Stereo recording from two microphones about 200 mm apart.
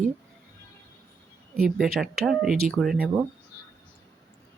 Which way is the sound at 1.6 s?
Centre (ahead or behind).